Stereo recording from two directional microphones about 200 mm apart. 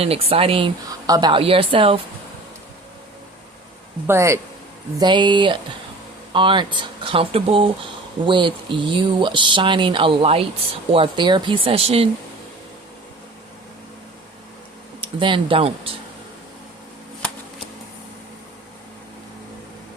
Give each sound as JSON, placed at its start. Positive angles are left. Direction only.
{"t": 0.0, "sound": "speech", "side_deg": -30}
{"t": 4.0, "sound": "a man's voice", "side_deg": -15}
{"t": 15.0, "sound": "speech", "side_deg": -25}